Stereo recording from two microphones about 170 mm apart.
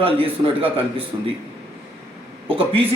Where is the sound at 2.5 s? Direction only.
30° right (ahead or behind).